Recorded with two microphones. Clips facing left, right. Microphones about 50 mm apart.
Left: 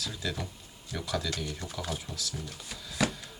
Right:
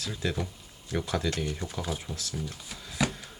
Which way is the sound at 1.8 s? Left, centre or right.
Centre.